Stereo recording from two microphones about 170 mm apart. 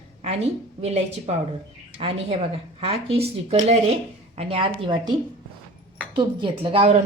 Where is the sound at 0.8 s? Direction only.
40° right (ahead or behind).